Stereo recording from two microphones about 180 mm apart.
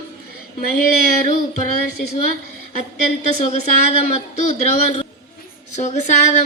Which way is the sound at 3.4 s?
40° left (ahead or behind).